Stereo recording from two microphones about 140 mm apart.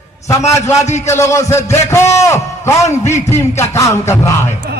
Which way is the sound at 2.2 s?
20° left (ahead or behind).